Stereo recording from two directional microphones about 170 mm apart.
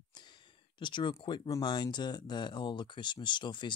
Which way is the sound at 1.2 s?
30° left (ahead or behind).